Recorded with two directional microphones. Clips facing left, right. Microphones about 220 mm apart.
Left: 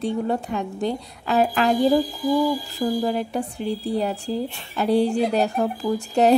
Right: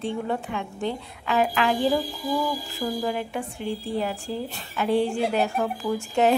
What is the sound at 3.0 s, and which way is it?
A woman's voice, 40° left (ahead or behind).